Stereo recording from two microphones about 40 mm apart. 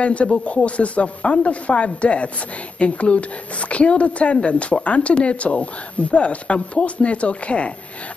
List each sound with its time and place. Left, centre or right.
0.0 s speech: left